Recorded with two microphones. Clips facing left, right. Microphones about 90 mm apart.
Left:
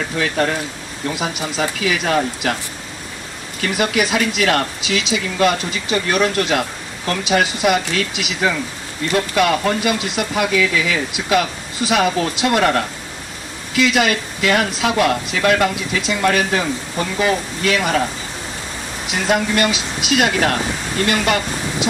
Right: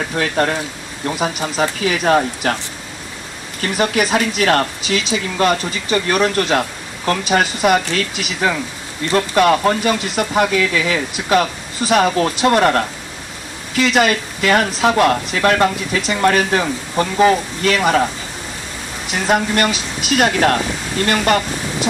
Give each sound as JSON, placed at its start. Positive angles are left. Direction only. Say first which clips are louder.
{"t": 0.2, "sound": "speech", "louder": "right 1 dB", "side_deg": -40}
{"t": 3.6, "sound": "speech", "louder": "right 1 dB", "side_deg": -40}
{"t": 19.3, "sound": "speech", "louder": "right 1 dB", "side_deg": -40}